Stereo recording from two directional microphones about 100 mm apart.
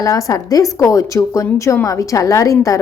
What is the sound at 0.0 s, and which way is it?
A woman's voice, 35° left (ahead or behind).